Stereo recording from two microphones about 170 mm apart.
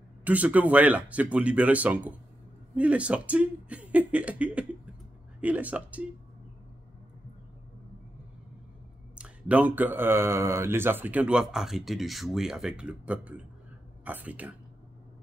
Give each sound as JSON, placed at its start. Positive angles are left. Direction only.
{"t": 0.2, "sound": "speech", "side_deg": -10}
{"t": 9.1, "sound": "speech", "side_deg": -10}